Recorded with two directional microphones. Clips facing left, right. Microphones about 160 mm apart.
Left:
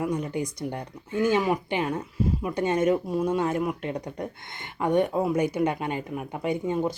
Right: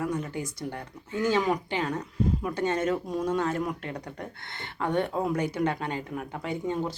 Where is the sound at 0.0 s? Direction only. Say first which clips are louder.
Left 3 dB; 15° left (ahead or behind).